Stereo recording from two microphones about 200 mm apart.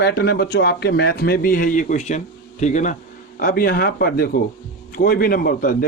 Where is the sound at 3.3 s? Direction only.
45° left (ahead or behind).